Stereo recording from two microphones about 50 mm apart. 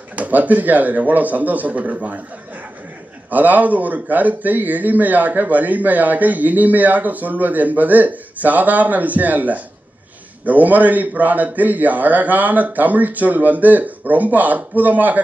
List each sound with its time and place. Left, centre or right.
0.1 s speech: right
3.3 s speech: right